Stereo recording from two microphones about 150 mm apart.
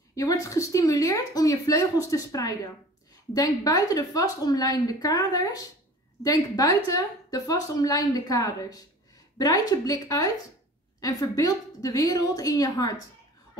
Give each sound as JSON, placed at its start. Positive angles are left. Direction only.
{"t": 0.1, "sound": "a woman's voice", "side_deg": 20}